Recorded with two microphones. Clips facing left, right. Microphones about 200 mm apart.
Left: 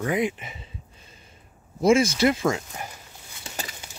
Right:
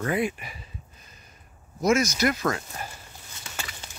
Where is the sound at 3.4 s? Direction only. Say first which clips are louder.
Left 3 dB; 30° left (ahead or behind).